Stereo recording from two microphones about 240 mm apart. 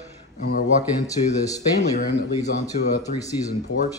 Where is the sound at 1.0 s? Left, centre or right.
Centre.